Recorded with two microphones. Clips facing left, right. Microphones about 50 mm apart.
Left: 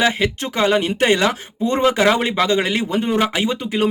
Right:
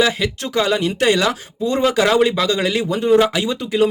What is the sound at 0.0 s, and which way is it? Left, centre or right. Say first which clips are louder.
Speech: even; left.